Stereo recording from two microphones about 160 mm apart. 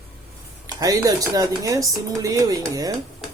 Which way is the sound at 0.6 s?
25° right (ahead or behind).